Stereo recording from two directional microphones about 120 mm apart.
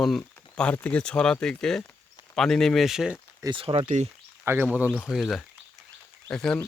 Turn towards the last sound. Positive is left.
turn(degrees=5)  # may be behind; listen again after turning